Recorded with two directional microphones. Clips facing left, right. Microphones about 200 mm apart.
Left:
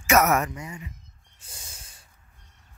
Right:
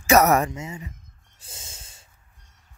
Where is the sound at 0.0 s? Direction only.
35° right (ahead or behind).